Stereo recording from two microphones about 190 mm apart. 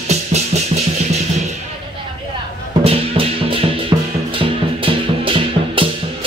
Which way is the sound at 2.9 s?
30° right (ahead or behind).